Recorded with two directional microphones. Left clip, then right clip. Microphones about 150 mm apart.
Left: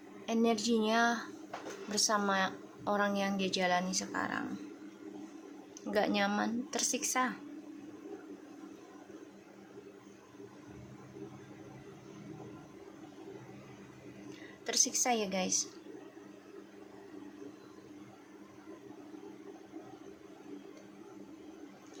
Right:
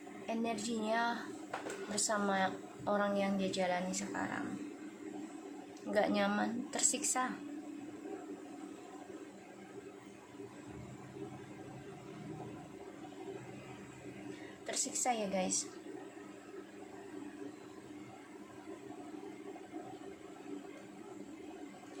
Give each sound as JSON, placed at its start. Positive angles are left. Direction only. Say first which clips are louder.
{"t": 0.3, "sound": "a woman's voice", "louder": "left 7 dB", "side_deg": 25}
{"t": 5.9, "sound": "a woman's voice", "louder": "left 1 dB", "side_deg": 20}
{"t": 14.7, "sound": "a woman's voice", "louder": "left 5 dB", "side_deg": 25}